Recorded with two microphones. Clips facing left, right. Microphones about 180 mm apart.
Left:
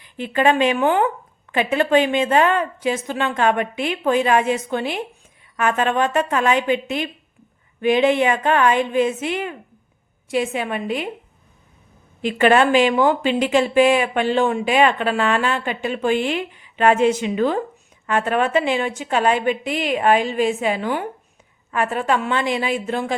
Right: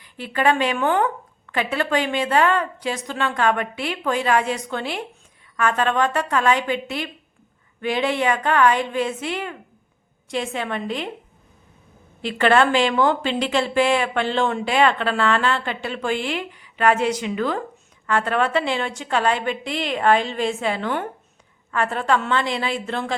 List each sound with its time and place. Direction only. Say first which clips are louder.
0.0 s a woman's voice: left 3 dB; 20° left (ahead or behind)
12.2 s speech: left 2 dB; 15° left (ahead or behind)